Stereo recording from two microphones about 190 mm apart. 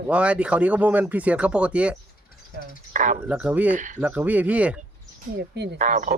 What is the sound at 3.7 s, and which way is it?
Speech, 40° right (ahead or behind).